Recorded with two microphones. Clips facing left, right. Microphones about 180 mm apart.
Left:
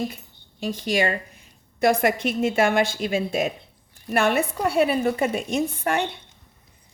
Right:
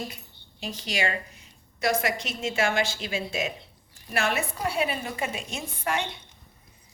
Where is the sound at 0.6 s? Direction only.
50° left (ahead or behind).